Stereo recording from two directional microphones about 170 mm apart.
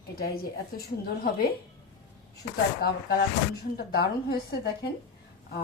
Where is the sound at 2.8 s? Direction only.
65° left (ahead or behind).